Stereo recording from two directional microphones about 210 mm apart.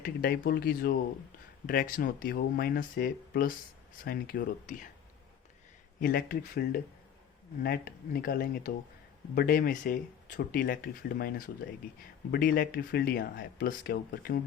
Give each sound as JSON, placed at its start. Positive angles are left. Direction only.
{"t": 0.0, "sound": "speech", "side_deg": 45}
{"t": 6.0, "sound": "speech", "side_deg": 45}